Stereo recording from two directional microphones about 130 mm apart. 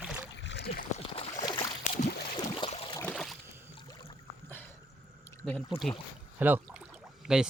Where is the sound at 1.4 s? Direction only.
35° left (ahead or behind).